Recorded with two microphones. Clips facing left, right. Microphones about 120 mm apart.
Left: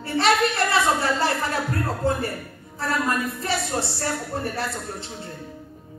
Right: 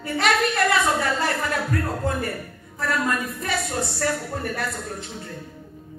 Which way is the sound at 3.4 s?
30° left (ahead or behind).